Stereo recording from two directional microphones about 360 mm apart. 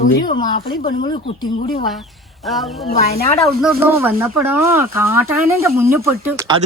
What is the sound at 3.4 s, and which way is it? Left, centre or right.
Speech, centre.